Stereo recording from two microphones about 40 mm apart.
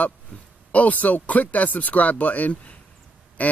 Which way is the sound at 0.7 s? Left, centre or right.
Left.